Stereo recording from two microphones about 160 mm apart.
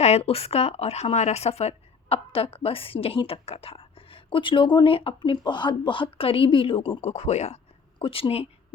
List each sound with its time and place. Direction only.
0.0 s a woman's voice: 40° left (ahead or behind)